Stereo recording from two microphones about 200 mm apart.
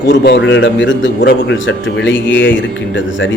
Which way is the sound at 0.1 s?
65° left (ahead or behind).